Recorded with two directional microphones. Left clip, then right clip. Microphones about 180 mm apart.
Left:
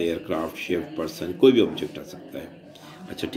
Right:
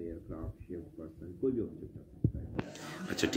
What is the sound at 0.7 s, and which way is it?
Speech, 45° left (ahead or behind).